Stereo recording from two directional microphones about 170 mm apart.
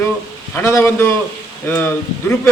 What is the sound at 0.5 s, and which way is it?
A man's voice, 15° left (ahead or behind).